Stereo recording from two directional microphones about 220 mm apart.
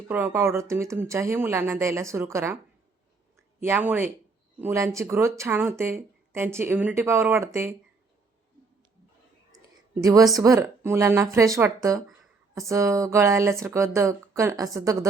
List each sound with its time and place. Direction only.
0.1 s speech: 10° right (ahead or behind)
3.6 s speech: 10° right (ahead or behind)
9.5 s whispering: 15° right (ahead or behind)
10.3 s speech: 15° right (ahead or behind)